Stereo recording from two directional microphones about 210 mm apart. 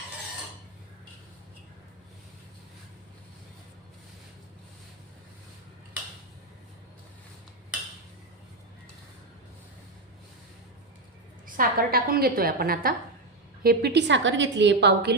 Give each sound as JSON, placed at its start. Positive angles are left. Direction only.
{"t": 11.4, "sound": "a woman's voice", "side_deg": -40}